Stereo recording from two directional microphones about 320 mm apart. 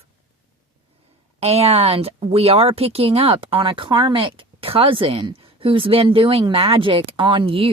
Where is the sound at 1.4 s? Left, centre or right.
Centre.